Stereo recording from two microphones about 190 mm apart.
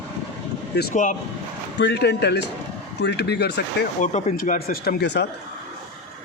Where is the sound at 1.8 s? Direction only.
65° left (ahead or behind).